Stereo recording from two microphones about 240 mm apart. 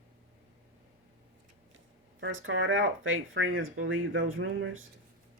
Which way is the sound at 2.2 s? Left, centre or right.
Right.